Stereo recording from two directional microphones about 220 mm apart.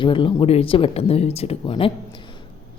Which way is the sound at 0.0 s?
20° left (ahead or behind).